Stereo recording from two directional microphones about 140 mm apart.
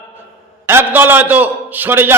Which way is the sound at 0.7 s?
15° right (ahead or behind).